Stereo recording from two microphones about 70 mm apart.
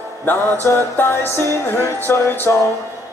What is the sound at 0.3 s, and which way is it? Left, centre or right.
Music, left.